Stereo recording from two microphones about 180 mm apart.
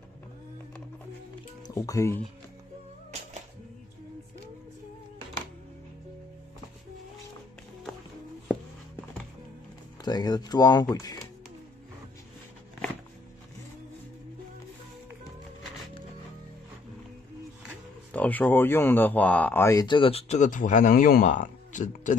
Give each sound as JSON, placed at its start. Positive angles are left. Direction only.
{"t": 1.8, "sound": "speech", "side_deg": 20}
{"t": 10.0, "sound": "speech", "side_deg": 20}
{"t": 18.1, "sound": "speech", "side_deg": 10}